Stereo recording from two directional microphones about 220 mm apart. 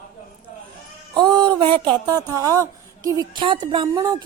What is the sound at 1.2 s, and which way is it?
A woman's voice, 20° right (ahead or behind).